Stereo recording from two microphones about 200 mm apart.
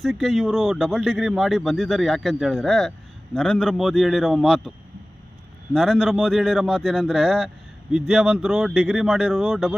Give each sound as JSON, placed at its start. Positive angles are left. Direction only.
{"t": 0.0, "sound": "speech", "side_deg": 0}
{"t": 5.7, "sound": "speech", "side_deg": 0}